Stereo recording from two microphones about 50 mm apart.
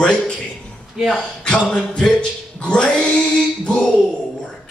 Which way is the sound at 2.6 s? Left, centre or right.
Centre.